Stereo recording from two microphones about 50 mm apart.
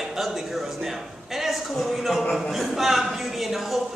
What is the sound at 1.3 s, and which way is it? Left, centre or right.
Speech, centre.